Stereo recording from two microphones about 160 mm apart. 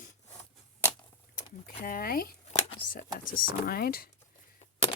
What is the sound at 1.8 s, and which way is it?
Speech, 65° left (ahead or behind).